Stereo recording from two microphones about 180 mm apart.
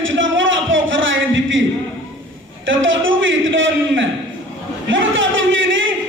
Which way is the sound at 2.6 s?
90° right.